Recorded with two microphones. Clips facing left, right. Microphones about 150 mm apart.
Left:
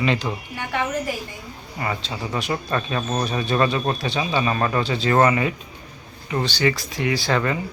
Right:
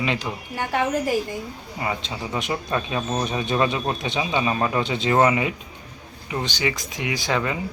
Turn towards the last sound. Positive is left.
turn(degrees=-10)  # may be behind; listen again after turning